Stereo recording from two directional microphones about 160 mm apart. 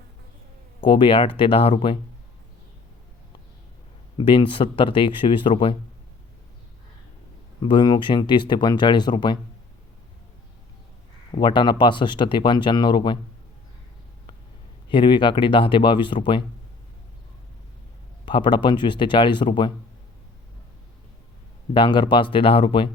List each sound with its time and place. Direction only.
0.8 s speech: 30° left (ahead or behind)
4.2 s speech: 30° left (ahead or behind)
7.6 s speech: 30° left (ahead or behind)
11.3 s speech: 30° left (ahead or behind)
14.8 s speech: 30° left (ahead or behind)
18.3 s speech: 30° left (ahead or behind)
21.7 s speech: 30° left (ahead or behind)